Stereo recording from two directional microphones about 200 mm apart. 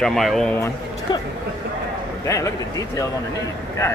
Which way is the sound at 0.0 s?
Centre (ahead or behind).